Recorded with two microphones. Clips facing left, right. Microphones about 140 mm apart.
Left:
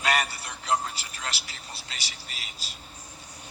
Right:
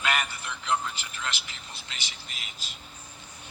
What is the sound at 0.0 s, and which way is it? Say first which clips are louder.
Vehicle: left 2 dB; 35° left (ahead or behind).